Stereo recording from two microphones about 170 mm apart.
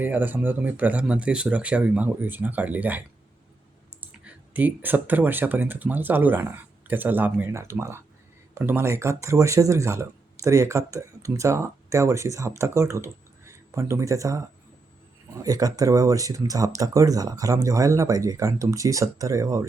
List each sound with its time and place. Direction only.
0.0 s speech: 10° right (ahead or behind)
4.0 s speech: 10° right (ahead or behind)